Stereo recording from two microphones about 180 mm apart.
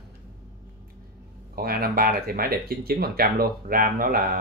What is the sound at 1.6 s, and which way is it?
Speech, 55° right (ahead or behind).